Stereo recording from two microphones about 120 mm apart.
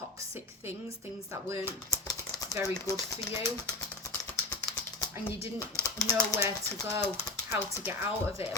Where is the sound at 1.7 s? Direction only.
30° left (ahead or behind).